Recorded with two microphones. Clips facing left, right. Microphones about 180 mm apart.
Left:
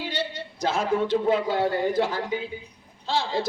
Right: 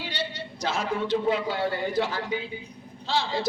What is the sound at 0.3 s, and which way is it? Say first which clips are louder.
A man's voice: left 4 dB; 50° left (ahead or behind).